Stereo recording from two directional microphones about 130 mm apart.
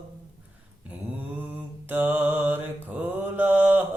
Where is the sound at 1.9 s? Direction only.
15° right (ahead or behind).